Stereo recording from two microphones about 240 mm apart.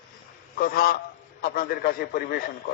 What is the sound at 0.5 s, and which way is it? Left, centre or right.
A man's voice, left.